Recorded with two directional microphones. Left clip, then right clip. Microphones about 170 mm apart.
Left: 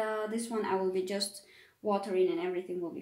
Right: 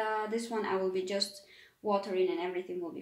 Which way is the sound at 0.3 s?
40° left (ahead or behind).